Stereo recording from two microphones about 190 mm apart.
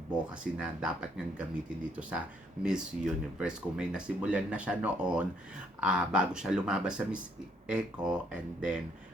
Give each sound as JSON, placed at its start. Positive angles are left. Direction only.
{"t": 0.1, "sound": "speech", "side_deg": -5}